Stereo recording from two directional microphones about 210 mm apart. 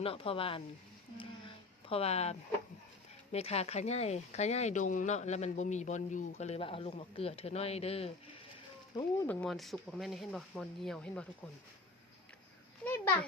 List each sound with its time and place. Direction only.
0.0 s speech: 25° left (ahead or behind)
1.2 s a sound: 25° left (ahead or behind)
3.3 s speech: 30° left (ahead or behind)
9.2 s speech: 5° left (ahead or behind)
12.8 s a child's voice: 10° left (ahead or behind)